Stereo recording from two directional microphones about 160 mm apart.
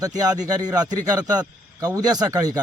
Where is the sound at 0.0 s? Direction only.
25° right (ahead or behind).